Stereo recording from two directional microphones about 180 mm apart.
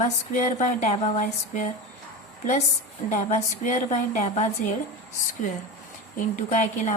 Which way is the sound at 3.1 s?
40° left (ahead or behind).